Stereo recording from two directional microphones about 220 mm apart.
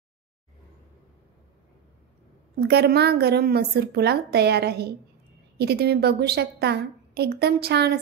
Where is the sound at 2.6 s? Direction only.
45° right (ahead or behind).